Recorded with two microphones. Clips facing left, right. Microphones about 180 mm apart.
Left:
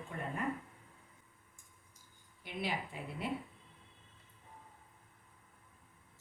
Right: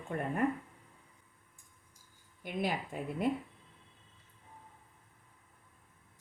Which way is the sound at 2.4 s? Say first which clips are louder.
Right 4 dB; 50° right (ahead or behind).